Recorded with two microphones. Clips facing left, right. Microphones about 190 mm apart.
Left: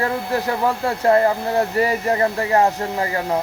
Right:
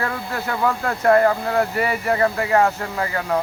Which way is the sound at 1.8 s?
40° left (ahead or behind).